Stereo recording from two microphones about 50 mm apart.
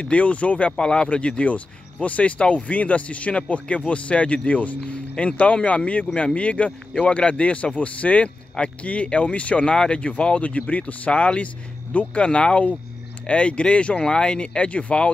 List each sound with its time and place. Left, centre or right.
0.0 s speech: left